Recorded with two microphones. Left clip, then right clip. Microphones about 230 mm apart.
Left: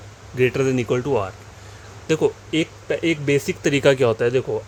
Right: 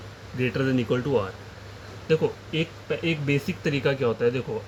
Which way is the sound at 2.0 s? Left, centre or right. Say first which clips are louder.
Left 4 dB; left.